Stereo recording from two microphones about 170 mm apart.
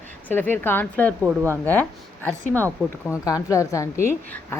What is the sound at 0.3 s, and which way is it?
Speech, 10° left (ahead or behind).